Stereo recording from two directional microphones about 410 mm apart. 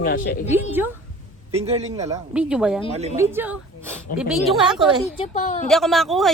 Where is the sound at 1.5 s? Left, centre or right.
Centre.